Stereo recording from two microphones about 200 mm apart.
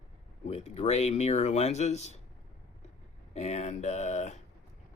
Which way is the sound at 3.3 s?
35° left (ahead or behind).